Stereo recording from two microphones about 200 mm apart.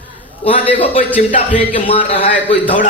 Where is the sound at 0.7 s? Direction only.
30° left (ahead or behind).